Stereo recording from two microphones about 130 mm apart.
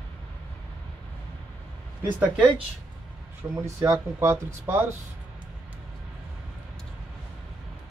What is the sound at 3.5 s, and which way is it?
Speech, 20° right (ahead or behind).